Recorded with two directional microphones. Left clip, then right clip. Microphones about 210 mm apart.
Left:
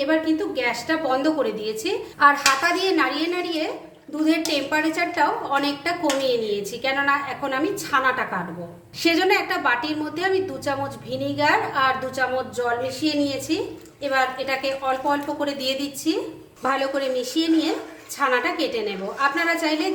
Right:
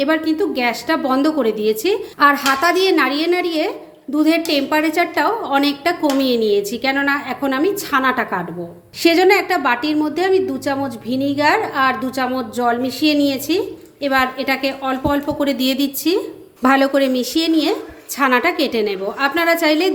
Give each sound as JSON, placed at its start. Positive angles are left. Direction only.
{"t": 0.0, "sound": "a woman's voice", "side_deg": -40}